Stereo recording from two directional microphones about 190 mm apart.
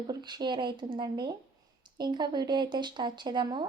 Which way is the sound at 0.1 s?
20° right (ahead or behind).